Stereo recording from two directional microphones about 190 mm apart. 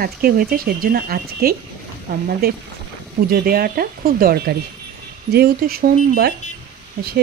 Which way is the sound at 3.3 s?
55° right (ahead or behind).